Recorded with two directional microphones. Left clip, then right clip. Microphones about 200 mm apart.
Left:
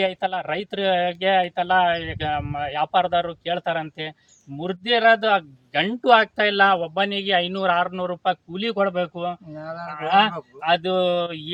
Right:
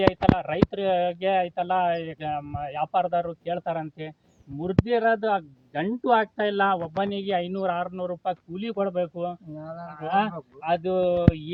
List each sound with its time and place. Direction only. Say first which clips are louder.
0.1 s speech: even; 5° right (ahead or behind); by 4.1 s 15° left (ahead or behind)
4.6 s speech: left 5 dB; 25° left (ahead or behind); by 11.5 s 5° right (ahead or behind)